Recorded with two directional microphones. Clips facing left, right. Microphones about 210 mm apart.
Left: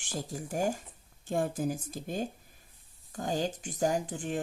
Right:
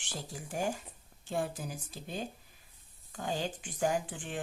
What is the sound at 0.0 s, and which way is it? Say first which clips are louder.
A woman's voice: left 6 dB; 45° left (ahead or behind).